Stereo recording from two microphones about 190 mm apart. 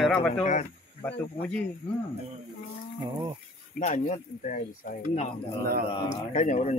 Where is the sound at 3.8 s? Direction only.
45° left (ahead or behind).